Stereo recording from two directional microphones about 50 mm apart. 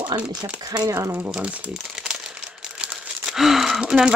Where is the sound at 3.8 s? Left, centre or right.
Centre.